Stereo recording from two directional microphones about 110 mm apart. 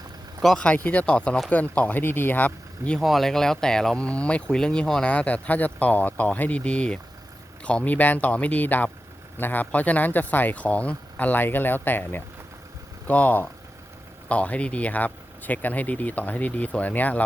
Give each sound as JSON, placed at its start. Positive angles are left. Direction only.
{"t": 0.4, "sound": "speech", "side_deg": 10}
{"t": 3.0, "sound": "speech", "side_deg": 0}